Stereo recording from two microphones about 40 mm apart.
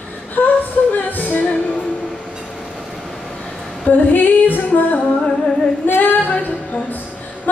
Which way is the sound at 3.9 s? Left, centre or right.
Left.